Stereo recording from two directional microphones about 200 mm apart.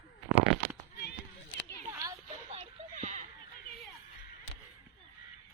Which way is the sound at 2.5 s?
35° right (ahead or behind).